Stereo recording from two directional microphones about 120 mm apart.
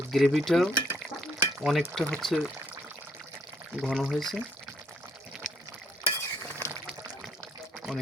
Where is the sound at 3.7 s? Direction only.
5° right (ahead or behind).